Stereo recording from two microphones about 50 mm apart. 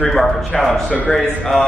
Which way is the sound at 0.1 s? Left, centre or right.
Centre.